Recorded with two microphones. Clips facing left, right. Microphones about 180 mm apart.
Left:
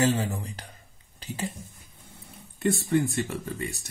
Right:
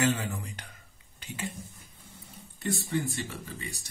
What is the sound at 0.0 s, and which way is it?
Speech, 35° left (ahead or behind).